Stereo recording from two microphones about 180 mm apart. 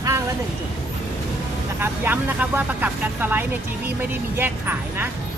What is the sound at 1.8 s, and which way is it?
Speech, 10° right (ahead or behind).